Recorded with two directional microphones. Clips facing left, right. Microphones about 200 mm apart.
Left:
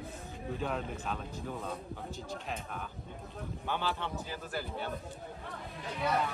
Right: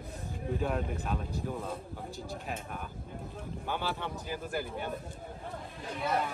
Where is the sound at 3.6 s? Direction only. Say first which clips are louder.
Even; 10° right (ahead or behind).